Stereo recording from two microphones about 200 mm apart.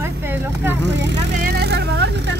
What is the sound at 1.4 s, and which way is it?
Vehicle, 55° right (ahead or behind).